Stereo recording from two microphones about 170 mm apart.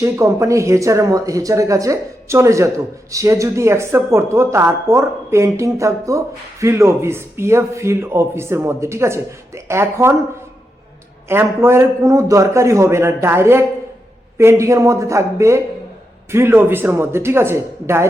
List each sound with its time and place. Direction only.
0.0 s speech: 20° right (ahead or behind)
11.3 s speech: 15° right (ahead or behind)